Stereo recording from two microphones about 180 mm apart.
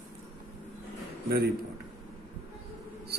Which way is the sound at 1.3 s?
60° right (ahead or behind).